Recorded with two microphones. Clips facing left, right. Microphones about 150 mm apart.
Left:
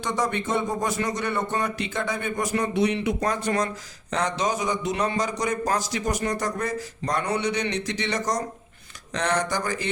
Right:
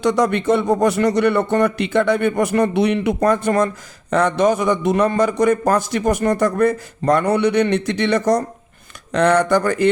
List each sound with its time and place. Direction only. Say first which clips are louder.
0.0 s a man's voice: right 10 dB; 70° right (ahead or behind)